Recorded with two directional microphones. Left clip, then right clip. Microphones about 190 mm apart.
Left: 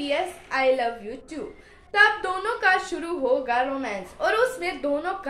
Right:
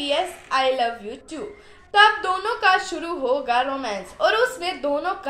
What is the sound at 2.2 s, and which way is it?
A woman's voice, 20° left (ahead or behind).